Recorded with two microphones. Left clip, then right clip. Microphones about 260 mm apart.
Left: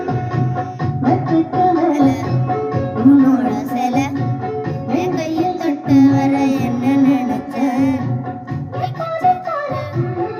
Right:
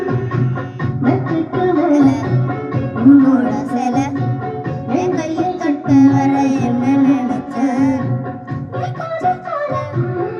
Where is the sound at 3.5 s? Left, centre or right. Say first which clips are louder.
Even; centre.